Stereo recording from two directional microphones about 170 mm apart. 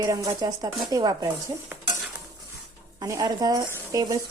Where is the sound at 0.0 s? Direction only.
20° right (ahead or behind).